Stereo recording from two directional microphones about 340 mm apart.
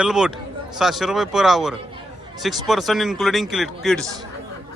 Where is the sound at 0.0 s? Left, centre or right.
Centre.